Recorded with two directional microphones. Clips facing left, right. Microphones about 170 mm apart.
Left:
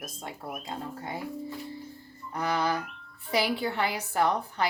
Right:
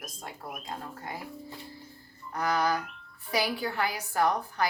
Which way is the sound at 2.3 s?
25° left (ahead or behind).